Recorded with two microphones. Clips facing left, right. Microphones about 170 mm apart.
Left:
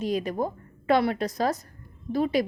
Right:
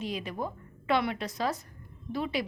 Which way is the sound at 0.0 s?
45° left (ahead or behind).